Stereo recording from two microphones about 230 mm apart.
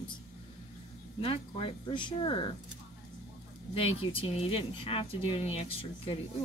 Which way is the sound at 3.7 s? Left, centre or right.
Left.